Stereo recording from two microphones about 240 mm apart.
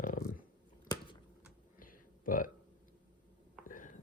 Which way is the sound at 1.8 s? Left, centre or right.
Left.